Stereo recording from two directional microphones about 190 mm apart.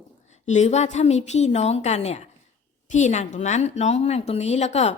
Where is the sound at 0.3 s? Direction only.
35° left (ahead or behind).